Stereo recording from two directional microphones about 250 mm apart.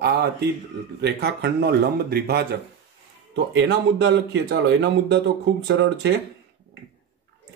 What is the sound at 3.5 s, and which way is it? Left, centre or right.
Speech, right.